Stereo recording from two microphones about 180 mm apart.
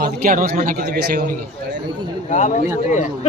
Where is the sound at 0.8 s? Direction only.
60° right (ahead or behind).